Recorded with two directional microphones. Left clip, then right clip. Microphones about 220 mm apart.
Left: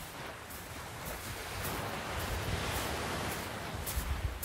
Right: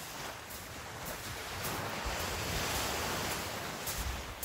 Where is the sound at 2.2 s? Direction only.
50° right (ahead or behind).